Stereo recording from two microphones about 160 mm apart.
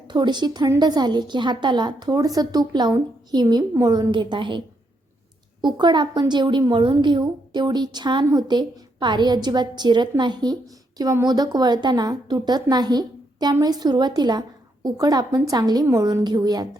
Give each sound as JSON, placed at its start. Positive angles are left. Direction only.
{"t": 0.1, "sound": "a woman's voice", "side_deg": -25}
{"t": 5.6, "sound": "a woman's voice", "side_deg": -30}